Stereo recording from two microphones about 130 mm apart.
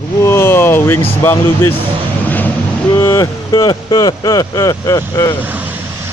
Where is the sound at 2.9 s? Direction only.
25° left (ahead or behind).